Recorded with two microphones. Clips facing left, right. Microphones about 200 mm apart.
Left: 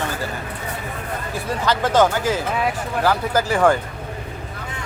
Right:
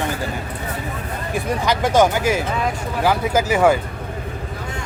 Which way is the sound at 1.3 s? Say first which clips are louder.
Right 2 dB; 15° right (ahead or behind).